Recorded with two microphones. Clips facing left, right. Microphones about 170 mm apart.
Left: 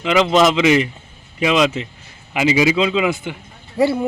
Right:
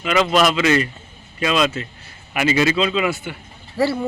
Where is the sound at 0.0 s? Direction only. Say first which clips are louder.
Left 3 dB; 20° left (ahead or behind).